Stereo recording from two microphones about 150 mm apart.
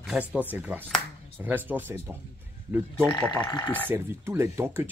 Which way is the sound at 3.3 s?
30° left (ahead or behind).